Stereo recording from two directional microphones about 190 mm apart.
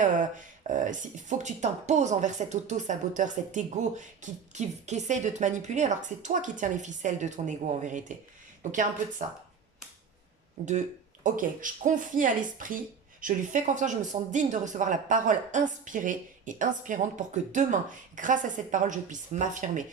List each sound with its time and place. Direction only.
0.0 s speech: 40° right (ahead or behind)
10.7 s speech: 40° right (ahead or behind)